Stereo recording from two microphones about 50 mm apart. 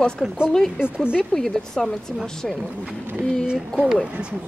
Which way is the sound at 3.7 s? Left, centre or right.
Centre.